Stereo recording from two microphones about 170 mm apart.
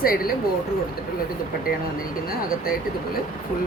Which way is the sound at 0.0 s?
60° left (ahead or behind).